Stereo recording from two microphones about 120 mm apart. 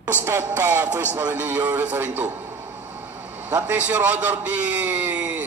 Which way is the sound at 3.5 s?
15° right (ahead or behind).